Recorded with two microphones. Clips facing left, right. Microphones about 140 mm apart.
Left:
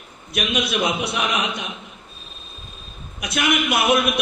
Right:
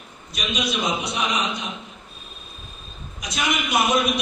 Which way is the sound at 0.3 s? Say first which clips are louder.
Left 4 dB; 60° left (ahead or behind).